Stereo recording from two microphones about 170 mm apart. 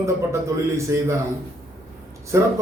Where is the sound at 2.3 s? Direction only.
15° right (ahead or behind).